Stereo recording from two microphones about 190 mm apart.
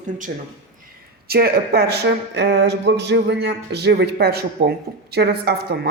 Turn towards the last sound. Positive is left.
turn(degrees=-55)  # may be behind; listen again after turning